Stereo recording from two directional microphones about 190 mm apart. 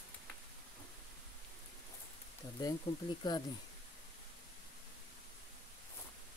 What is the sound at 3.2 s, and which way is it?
Speech, 25° left (ahead or behind).